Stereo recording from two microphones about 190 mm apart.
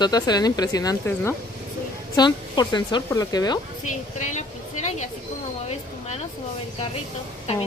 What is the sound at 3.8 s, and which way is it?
A woman's voice, 40° left (ahead or behind).